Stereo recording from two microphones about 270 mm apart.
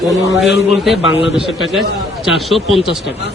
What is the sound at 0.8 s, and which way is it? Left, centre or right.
Speech, centre.